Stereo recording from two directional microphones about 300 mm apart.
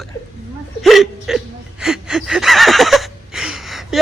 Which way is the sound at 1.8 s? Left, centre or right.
Centre.